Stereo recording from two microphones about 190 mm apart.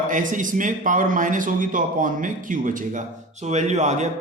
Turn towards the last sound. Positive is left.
turn(degrees=-35)  # may be behind; listen again after turning